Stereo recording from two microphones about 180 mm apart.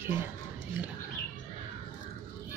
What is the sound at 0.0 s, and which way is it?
Speech, 10° right (ahead or behind).